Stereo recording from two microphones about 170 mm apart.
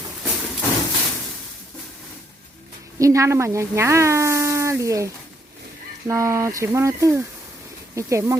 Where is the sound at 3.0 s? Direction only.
20° right (ahead or behind).